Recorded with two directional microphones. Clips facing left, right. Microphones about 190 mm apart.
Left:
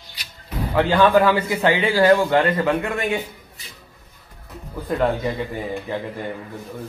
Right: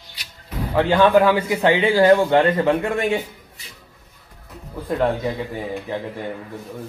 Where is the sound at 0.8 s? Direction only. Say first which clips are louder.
Right 1 dB; 20° right (ahead or behind).